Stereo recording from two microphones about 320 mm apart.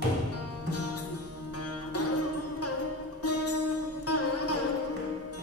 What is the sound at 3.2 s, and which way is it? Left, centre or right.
Music, left.